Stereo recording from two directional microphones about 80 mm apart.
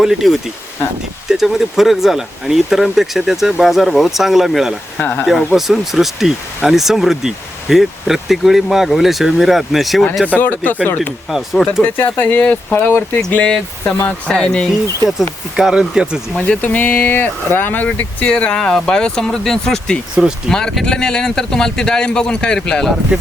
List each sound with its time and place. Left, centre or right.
0.0 s speech: centre
4.9 s speech: left
5.2 s speech: centre
10.2 s speech: left
11.3 s speech: centre
11.8 s speech: left
13.3 s speech: centre
15.5 s speech: centre
16.6 s speech: left